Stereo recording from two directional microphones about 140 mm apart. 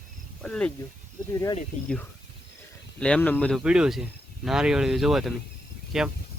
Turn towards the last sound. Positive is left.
turn(degrees=-5)  # may be behind; listen again after turning